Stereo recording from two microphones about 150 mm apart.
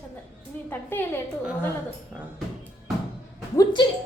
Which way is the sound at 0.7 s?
15° left (ahead or behind).